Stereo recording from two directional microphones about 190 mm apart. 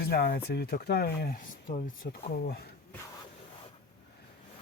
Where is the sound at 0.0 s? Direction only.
55° left (ahead or behind).